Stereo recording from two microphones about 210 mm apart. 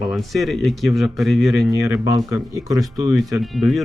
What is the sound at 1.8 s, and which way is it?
Speech, 70° left (ahead or behind).